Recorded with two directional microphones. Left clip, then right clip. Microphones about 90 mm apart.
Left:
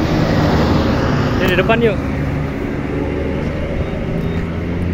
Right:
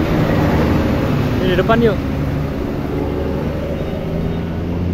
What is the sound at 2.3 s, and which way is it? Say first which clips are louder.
Vehicle: even; 10° right (ahead or behind).